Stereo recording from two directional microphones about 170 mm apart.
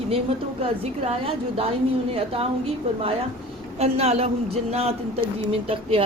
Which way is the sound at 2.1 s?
35° right (ahead or behind).